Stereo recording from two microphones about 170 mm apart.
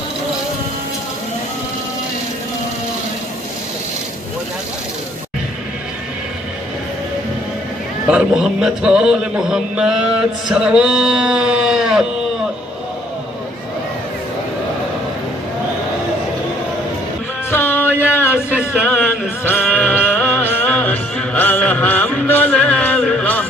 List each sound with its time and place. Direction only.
8.1 s a man's voice: 5° right (ahead or behind)
17.5 s music: 10° left (ahead or behind)
18.0 s a sound: 10° left (ahead or behind)
18.9 s music: 10° left (ahead or behind)